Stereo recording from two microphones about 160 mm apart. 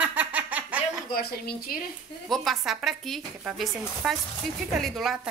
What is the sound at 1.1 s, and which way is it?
Speech, 75° left (ahead or behind).